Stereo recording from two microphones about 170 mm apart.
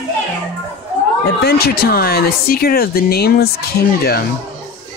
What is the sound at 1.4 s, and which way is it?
Speech, 70° left (ahead or behind).